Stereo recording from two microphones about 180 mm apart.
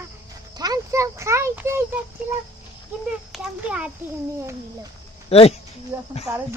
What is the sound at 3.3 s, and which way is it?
Speech, 5° right (ahead or behind).